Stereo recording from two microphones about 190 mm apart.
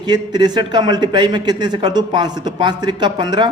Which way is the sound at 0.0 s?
20° right (ahead or behind).